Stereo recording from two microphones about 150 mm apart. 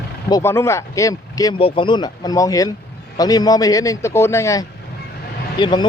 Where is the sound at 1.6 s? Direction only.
35° left (ahead or behind).